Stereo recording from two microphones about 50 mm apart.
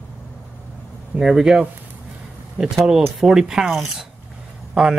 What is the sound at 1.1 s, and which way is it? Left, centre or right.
Speech, centre.